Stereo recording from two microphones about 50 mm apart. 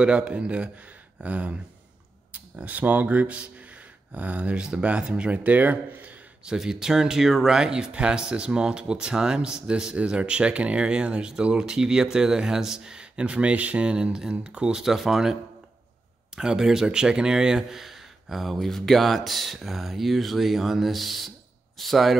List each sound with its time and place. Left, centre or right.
0.0 s speech: right
6.4 s speech: centre
14.8 s speech: centre
16.3 s speech: centre